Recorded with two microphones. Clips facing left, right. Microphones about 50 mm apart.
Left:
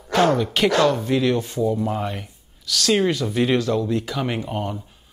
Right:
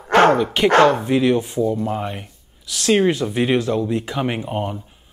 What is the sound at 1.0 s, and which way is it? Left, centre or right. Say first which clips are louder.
Speech: right 3 dB; centre.